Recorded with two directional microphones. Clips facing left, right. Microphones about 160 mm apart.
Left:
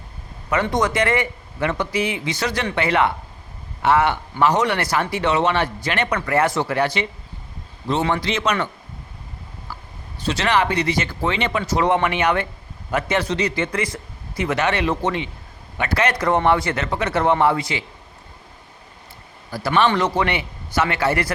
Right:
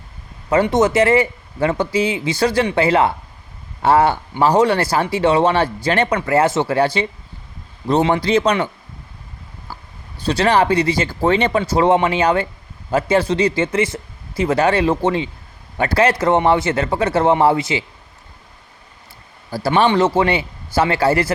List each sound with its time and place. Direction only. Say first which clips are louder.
0.5 s a man's voice: right 6 dB; 25° right (ahead or behind)
8.2 s speech: right 6 dB; 35° right (ahead or behind)
10.2 s a man's voice: right 5 dB; 35° right (ahead or behind)
19.5 s a man's voice: right 3 dB; 35° right (ahead or behind)